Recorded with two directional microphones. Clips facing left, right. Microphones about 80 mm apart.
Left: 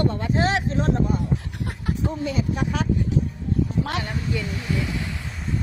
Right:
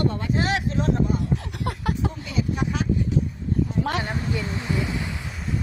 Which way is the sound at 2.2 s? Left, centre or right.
Left.